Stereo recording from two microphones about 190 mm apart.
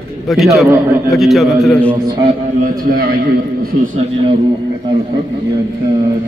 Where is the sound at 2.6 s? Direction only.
50° right (ahead or behind).